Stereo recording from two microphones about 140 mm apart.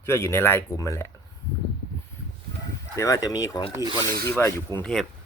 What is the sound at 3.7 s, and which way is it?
Speech, 25° right (ahead or behind).